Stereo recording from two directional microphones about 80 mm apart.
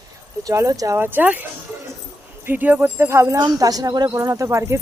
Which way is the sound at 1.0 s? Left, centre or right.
Right.